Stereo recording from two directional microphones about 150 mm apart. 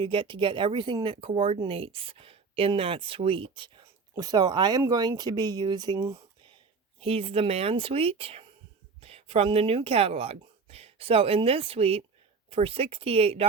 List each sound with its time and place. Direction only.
0.0 s speech: 35° right (ahead or behind)
7.0 s speech: 40° right (ahead or behind)